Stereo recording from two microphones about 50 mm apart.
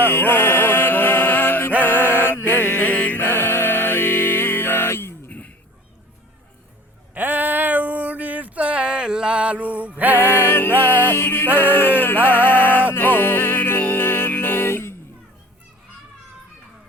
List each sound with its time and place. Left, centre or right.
0.0 s music: left
1.8 s mantra: left
7.1 s a sound: right
10.0 s music: right
10.2 s music: left
11.5 s music: left